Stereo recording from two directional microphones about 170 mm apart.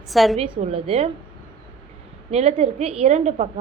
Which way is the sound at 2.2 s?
35° right (ahead or behind).